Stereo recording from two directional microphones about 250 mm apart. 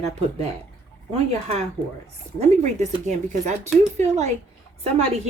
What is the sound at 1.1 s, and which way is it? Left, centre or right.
Speech, right.